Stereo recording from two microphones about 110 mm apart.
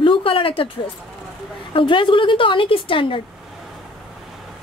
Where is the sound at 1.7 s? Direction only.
50° left (ahead or behind).